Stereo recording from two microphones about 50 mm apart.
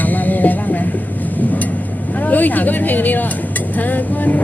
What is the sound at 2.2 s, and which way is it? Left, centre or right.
Speech, left.